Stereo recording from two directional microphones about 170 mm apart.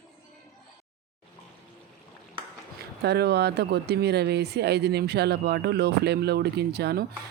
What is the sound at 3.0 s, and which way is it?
Speech, 75° right (ahead or behind).